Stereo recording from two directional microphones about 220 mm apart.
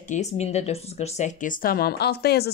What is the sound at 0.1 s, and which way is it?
A woman's voice, 30° left (ahead or behind).